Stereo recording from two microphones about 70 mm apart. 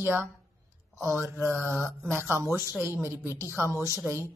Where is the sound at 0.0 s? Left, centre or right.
Right.